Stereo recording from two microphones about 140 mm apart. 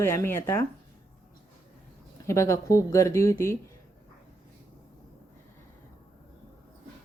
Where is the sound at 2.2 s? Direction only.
20° left (ahead or behind).